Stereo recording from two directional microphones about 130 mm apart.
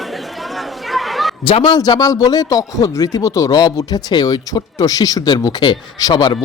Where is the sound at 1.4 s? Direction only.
40° left (ahead or behind).